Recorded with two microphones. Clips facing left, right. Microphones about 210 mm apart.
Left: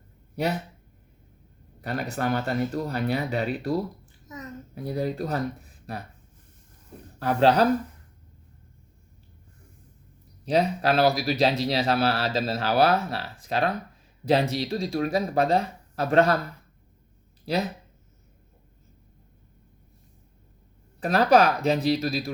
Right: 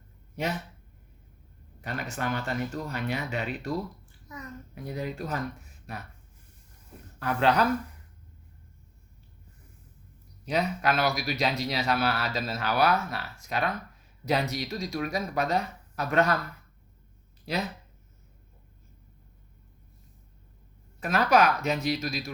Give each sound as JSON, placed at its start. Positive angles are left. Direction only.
{"t": 0.3, "sound": "speech", "side_deg": 40}
{"t": 1.8, "sound": "a man's voice", "side_deg": 40}
{"t": 7.2, "sound": "a man's voice", "side_deg": 35}
{"t": 10.4, "sound": "a man's voice", "side_deg": 35}
{"t": 17.4, "sound": "speech", "side_deg": 35}
{"t": 21.0, "sound": "a man's voice", "side_deg": 35}